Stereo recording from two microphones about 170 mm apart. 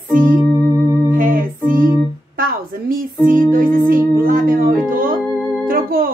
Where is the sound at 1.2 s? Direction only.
55° right (ahead or behind).